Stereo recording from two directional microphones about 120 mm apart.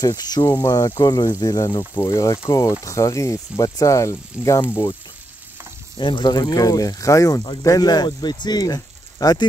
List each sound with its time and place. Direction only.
0.0 s speech: 35° left (ahead or behind)
5.9 s speech: 40° left (ahead or behind)